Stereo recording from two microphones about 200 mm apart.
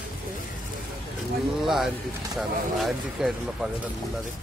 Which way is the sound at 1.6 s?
Centre (ahead or behind).